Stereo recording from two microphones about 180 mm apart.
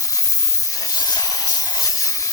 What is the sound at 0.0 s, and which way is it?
Hiss, 20° left (ahead or behind).